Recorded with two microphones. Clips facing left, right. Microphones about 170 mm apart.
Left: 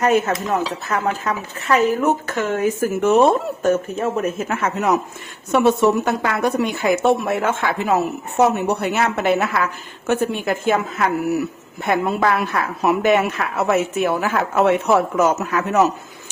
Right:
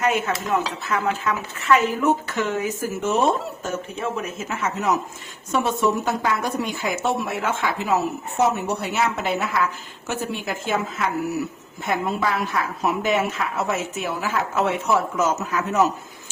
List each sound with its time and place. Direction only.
0.0 s speech: 45° left (ahead or behind); by 15.8 s 65° left (ahead or behind)